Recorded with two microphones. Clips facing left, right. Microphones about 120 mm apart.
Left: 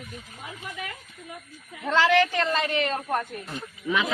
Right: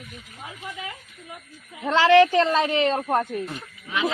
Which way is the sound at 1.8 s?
30° right (ahead or behind).